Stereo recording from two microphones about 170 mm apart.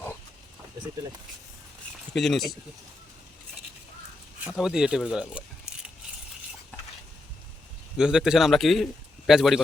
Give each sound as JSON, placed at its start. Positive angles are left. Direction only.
{"t": 2.1, "sound": "a man's voice", "side_deg": 0}
{"t": 4.4, "sound": "a man's voice", "side_deg": -5}
{"t": 7.9, "sound": "a man's voice", "side_deg": -5}